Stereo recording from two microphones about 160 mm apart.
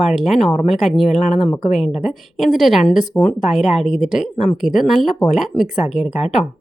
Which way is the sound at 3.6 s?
45° left (ahead or behind).